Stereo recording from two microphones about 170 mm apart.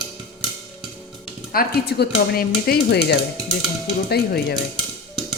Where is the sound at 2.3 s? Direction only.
65° left (ahead or behind).